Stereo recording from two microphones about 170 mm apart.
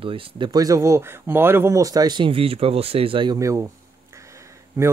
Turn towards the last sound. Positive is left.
turn(degrees=-15)  # may be behind; listen again after turning